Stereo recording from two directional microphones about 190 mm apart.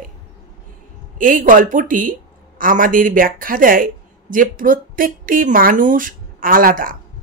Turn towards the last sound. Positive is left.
turn(degrees=-45)  # may be behind; listen again after turning